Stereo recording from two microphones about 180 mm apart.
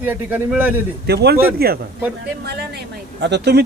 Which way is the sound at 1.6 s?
60° right (ahead or behind).